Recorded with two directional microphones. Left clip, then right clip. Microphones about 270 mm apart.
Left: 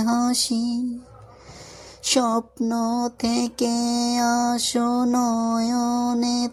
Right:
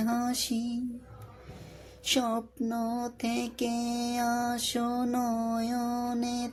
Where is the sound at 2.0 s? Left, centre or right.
Left.